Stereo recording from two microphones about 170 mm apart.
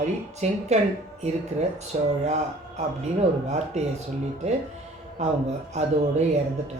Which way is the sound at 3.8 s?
40° right (ahead or behind).